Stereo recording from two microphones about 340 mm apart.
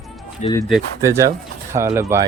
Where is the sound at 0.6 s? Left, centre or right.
Centre.